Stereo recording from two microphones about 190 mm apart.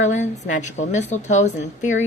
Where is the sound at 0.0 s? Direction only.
40° left (ahead or behind).